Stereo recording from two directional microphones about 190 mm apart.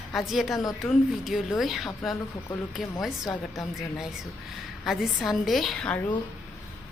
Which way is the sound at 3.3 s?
15° left (ahead or behind).